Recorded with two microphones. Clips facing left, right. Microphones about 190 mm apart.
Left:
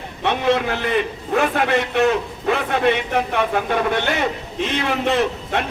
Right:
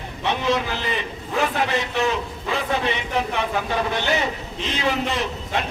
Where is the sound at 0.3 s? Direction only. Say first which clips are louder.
Left 4 dB; 55° left (ahead or behind).